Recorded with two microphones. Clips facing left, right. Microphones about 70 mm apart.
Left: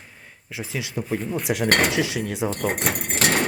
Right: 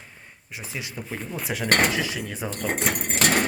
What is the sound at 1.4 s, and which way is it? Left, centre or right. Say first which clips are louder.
Cutlery: even; left.